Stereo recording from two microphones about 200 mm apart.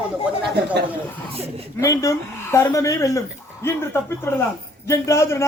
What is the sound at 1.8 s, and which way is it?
Speech, 15° left (ahead or behind).